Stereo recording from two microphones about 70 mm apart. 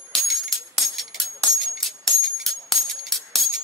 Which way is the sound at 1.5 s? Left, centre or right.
Centre.